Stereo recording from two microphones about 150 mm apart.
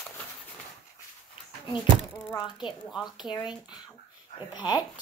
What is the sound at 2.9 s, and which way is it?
Speech, centre (ahead or behind).